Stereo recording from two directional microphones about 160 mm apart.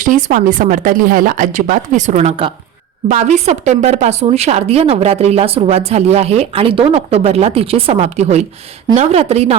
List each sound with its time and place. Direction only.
0.0 s a woman's voice: 55° right (ahead or behind)